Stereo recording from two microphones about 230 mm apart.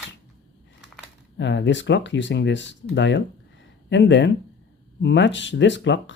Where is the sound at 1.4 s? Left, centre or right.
Left.